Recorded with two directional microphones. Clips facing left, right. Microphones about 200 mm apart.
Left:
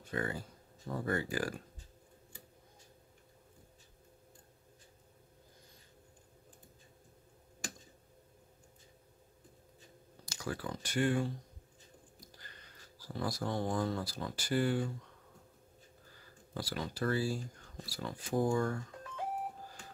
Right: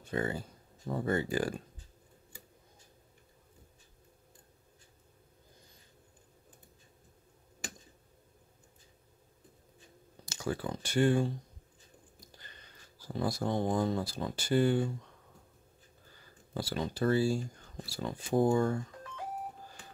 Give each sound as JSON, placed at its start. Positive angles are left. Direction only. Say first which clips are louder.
{"t": 0.0, "sound": "speech", "louder": "right 4 dB", "side_deg": -25}
{"t": 10.2, "sound": "speech", "louder": "right 5 dB", "side_deg": -25}
{"t": 13.0, "sound": "speech", "louder": "right 4 dB", "side_deg": -25}
{"t": 16.5, "sound": "speech", "louder": "right 4 dB", "side_deg": -25}